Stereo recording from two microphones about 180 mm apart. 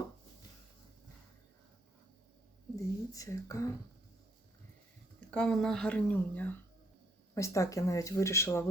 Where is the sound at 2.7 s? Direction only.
20° left (ahead or behind).